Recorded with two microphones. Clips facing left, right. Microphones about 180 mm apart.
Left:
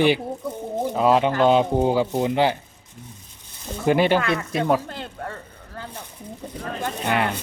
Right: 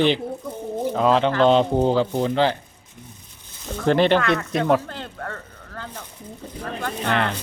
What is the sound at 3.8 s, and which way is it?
Speech, 10° left (ahead or behind).